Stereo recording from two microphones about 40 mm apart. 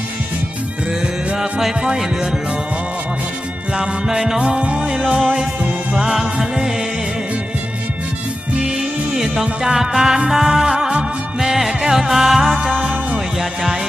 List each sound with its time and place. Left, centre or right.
3.7 s music: centre
4.4 s music: right
5.9 s music: centre
8.5 s music: centre
12.7 s music: right
13.4 s music: centre